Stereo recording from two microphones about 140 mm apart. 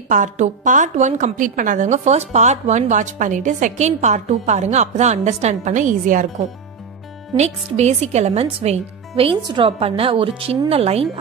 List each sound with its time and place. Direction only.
0.1 s a woman's voice: 65° right (ahead or behind)
7.3 s speech: 50° right (ahead or behind)